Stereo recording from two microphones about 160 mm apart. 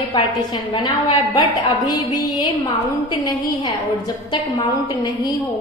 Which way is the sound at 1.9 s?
25° left (ahead or behind).